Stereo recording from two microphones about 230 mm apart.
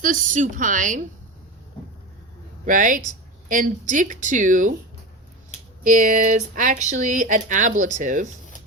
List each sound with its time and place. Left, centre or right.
0.0 s speech: right
2.6 s speech: right
5.8 s speech: right